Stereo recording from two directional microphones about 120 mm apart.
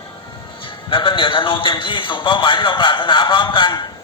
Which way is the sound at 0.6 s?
45° left (ahead or behind).